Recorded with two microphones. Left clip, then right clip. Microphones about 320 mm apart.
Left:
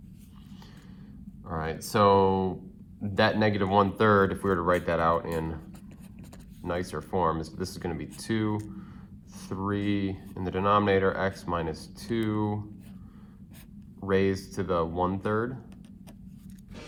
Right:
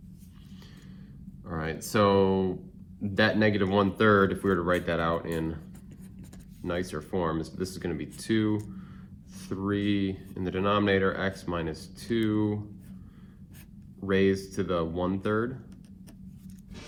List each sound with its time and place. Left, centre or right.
1.5 s speech: centre
6.6 s speech: centre
14.0 s speech: centre